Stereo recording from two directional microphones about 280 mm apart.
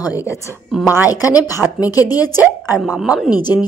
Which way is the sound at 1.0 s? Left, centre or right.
Centre.